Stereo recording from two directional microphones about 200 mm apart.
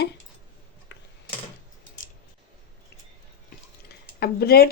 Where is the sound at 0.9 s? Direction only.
60° left (ahead or behind).